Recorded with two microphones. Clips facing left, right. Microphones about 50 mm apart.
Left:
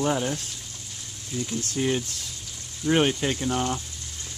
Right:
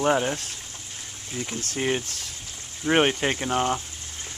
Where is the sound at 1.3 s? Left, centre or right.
Right.